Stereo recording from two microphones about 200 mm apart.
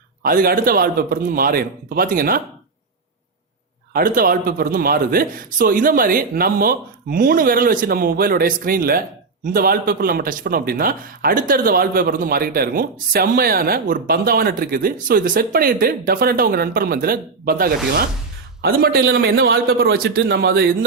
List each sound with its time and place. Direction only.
0.2 s a man's voice: 45° right (ahead or behind)
3.9 s a man's voice: 45° right (ahead or behind)
18.8 s a man's voice: 50° right (ahead or behind)